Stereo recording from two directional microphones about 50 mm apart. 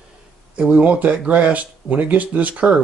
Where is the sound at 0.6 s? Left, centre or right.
Right.